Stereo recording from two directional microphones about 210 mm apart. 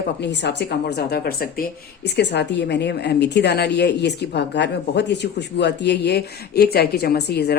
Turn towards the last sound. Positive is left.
turn(degrees=50)  # may be behind; listen again after turning